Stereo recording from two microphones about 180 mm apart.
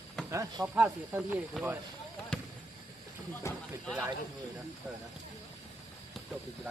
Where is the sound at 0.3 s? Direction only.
15° right (ahead or behind).